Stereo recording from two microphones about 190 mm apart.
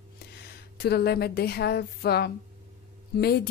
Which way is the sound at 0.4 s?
55° left (ahead or behind).